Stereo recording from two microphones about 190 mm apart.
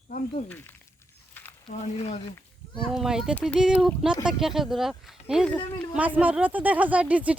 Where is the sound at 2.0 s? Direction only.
35° left (ahead or behind).